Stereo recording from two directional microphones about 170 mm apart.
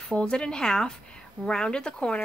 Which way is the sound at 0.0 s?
5° left (ahead or behind).